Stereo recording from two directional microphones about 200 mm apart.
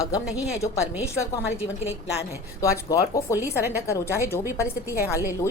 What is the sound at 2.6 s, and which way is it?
A woman's voice, 15° left (ahead or behind).